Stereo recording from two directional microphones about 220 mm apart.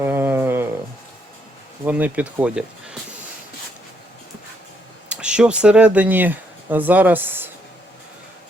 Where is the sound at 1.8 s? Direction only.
5° right (ahead or behind).